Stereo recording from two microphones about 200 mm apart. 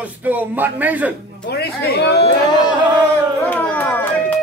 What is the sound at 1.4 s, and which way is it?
Speech, 55° left (ahead or behind).